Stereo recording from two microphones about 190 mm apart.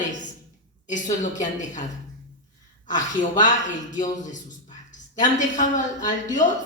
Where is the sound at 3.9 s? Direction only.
40° left (ahead or behind).